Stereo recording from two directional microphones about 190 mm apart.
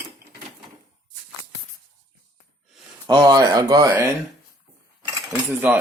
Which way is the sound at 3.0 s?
20° right (ahead or behind).